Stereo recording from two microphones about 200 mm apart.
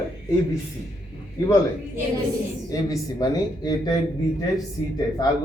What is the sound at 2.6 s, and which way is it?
Speech, 20° left (ahead or behind).